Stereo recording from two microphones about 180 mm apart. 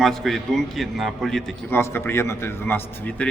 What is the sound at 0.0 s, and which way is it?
Speech, centre (ahead or behind).